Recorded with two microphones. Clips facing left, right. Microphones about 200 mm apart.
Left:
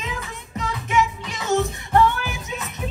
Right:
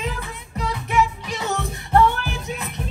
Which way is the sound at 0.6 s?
35° right (ahead or behind).